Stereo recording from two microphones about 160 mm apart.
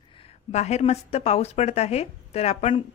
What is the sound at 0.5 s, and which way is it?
Speech, 45° left (ahead or behind).